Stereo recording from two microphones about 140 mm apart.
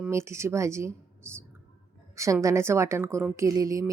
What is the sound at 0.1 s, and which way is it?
Speech, 20° right (ahead or behind).